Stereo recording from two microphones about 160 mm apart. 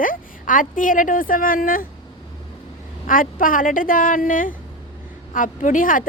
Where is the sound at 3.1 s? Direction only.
60° left (ahead or behind).